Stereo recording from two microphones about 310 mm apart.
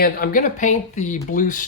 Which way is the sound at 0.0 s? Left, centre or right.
Left.